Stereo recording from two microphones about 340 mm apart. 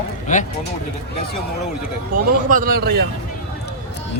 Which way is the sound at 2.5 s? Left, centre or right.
Right.